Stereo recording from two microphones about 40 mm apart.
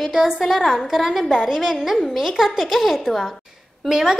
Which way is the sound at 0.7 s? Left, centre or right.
Centre.